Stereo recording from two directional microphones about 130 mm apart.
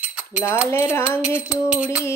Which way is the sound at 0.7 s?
20° left (ahead or behind).